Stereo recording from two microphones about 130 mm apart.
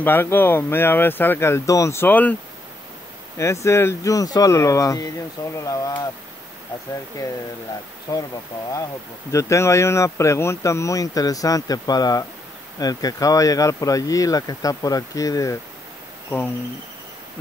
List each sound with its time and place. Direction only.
0.0 s speech: 15° left (ahead or behind)
3.6 s speech: 20° left (ahead or behind)
8.1 s speech: 25° left (ahead or behind)
9.3 s speech: 20° left (ahead or behind)